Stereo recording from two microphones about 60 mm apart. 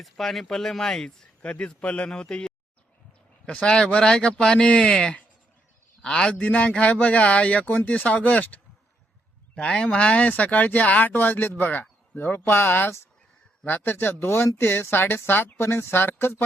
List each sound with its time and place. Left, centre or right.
0.0 s a man's voice: centre; by 16.4 s left